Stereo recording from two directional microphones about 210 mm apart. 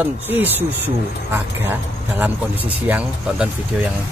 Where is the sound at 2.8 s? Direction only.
5° right (ahead or behind).